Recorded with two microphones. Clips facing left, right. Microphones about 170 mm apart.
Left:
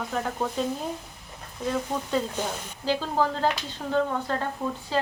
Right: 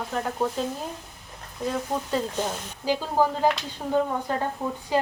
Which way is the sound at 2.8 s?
10° right (ahead or behind).